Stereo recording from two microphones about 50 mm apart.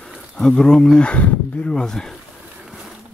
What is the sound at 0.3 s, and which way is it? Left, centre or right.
Speech, centre.